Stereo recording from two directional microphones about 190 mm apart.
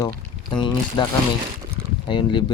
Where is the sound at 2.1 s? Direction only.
25° left (ahead or behind).